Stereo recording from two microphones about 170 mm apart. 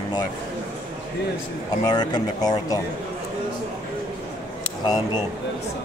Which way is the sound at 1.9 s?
25° left (ahead or behind).